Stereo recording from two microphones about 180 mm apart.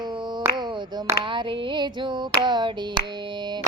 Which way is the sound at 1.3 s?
30° right (ahead or behind).